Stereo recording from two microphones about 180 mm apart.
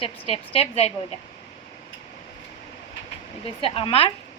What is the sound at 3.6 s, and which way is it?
Speech, 30° left (ahead or behind).